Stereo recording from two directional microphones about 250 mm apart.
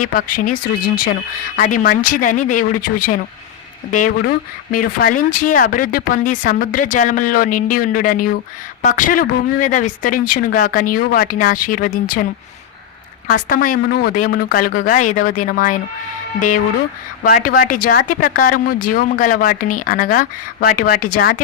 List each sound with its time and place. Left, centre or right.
0.0 s speech: left
1.5 s speech: left
13.2 s speech: left
17.2 s speech: left